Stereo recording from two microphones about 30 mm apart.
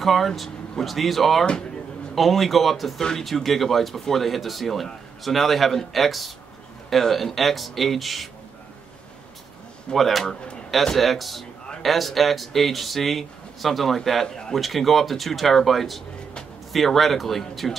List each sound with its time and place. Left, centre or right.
0.0 s speech: centre
3.0 s speech: centre
3.3 s speech: centre
9.9 s speech: centre
14.2 s a man's voice: left
14.5 s speech: centre